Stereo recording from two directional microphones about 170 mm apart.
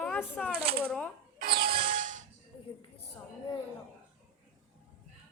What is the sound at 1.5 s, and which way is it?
Music, 65° right (ahead or behind).